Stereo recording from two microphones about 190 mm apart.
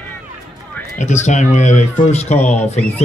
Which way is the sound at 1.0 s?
40° left (ahead or behind).